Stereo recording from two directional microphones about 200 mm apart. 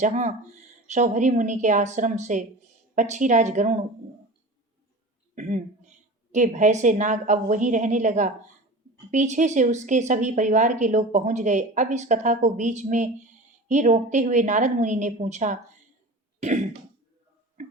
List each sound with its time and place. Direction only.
0.0 s a woman's voice: 35° right (ahead or behind)
5.3 s a woman's voice: 35° right (ahead or behind)
17.6 s a sound: 35° right (ahead or behind)